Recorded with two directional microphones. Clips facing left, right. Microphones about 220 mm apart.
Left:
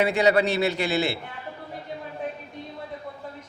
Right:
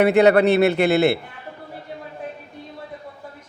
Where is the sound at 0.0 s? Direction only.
60° right (ahead or behind).